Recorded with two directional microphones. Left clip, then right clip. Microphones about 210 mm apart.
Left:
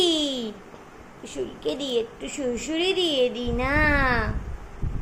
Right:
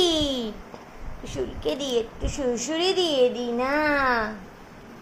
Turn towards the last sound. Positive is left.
turn(degrees=0)  # may be behind; listen again after turning